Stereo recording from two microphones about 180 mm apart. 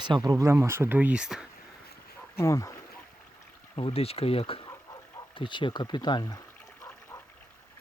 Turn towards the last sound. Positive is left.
turn(degrees=20)  # may be behind; listen again after turning